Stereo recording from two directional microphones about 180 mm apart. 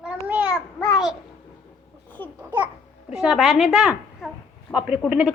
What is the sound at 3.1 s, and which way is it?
A child's voice, 5° right (ahead or behind).